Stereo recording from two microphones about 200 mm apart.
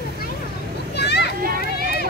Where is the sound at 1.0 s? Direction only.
55° left (ahead or behind).